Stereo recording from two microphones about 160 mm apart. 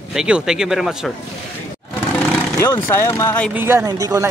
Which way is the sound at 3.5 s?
15° right (ahead or behind).